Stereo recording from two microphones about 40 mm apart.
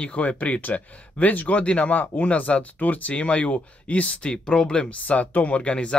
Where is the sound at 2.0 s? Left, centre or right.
Left.